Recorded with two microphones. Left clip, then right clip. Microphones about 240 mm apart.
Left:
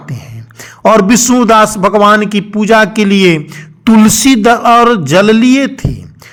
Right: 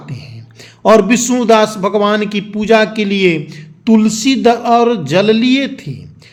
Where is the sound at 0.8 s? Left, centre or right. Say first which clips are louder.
Left 2 dB; left.